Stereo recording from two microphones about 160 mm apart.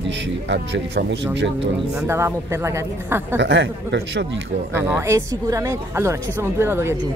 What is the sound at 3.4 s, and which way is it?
Speech, 90° right.